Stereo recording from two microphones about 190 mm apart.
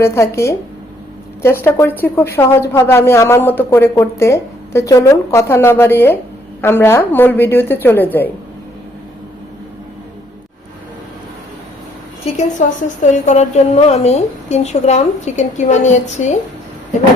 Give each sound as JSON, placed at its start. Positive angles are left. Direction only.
{"t": 0.0, "sound": "a woman's voice", "side_deg": 15}
{"t": 12.2, "sound": "a woman's voice", "side_deg": 40}